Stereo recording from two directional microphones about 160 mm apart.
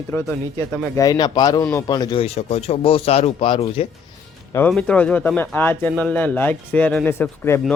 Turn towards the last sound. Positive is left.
turn(degrees=10)  # may be behind; listen again after turning